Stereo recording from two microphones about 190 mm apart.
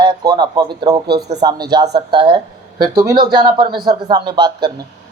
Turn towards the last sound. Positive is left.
turn(degrees=-25)  # may be behind; listen again after turning